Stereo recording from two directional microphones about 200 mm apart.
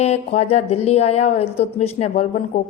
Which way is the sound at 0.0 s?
30° left (ahead or behind).